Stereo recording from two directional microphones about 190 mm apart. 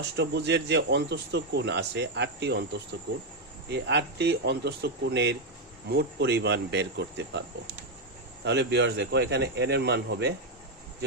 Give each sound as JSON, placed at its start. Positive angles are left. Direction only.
{"t": 0.2, "sound": "speech", "side_deg": -65}
{"t": 3.7, "sound": "speech", "side_deg": -65}
{"t": 8.4, "sound": "speech", "side_deg": -65}